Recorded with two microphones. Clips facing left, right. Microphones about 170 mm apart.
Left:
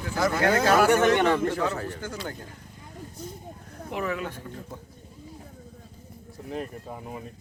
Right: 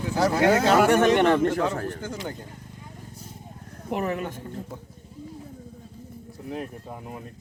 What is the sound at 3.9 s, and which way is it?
Speech, 45° right (ahead or behind).